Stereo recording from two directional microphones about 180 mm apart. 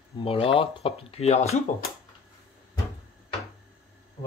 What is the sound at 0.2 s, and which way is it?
Speech, 30° left (ahead or behind).